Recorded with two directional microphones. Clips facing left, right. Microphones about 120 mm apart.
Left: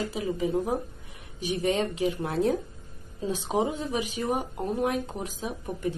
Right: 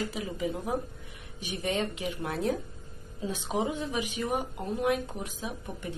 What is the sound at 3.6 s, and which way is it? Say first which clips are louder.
A woman's voice: left 2 dB; 35° left (ahead or behind).